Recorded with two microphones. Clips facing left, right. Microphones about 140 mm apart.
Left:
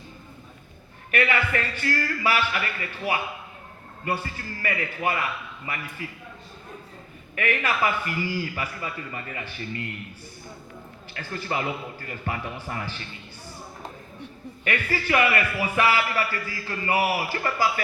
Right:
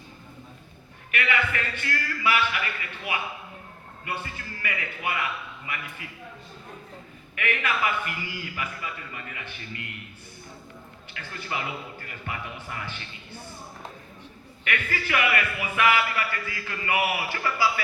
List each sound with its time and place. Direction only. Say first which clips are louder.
1.1 s a man's voice: left 3 dB; 40° left (ahead or behind)
7.3 s a man's voice: left 3 dB; 35° left (ahead or behind)
11.1 s a man's voice: left 4 dB; 35° left (ahead or behind)
14.6 s a man's voice: left 3 dB; 35° left (ahead or behind)